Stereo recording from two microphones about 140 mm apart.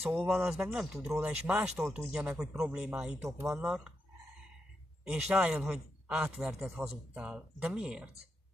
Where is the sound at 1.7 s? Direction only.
15° right (ahead or behind).